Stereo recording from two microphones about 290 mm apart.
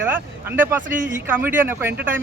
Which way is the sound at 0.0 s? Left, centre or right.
Centre.